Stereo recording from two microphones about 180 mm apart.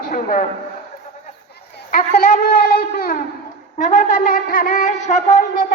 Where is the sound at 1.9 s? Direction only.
50° left (ahead or behind).